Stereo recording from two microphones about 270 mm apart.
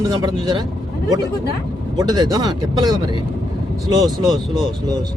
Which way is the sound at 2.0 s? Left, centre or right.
Centre.